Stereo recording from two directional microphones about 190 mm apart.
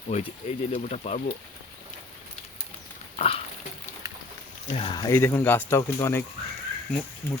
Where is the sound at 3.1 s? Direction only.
30° left (ahead or behind).